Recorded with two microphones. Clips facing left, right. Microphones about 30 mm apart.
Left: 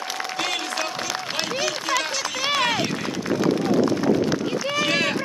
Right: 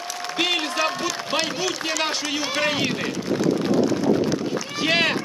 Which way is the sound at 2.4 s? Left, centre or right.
Left.